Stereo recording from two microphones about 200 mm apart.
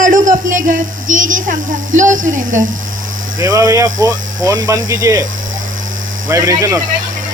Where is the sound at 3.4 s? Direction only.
15° right (ahead or behind).